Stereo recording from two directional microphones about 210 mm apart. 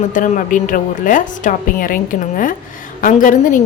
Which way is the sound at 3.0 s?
40° left (ahead or behind).